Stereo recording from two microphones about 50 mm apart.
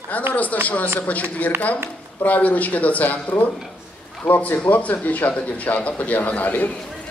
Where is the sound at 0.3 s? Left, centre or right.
Left.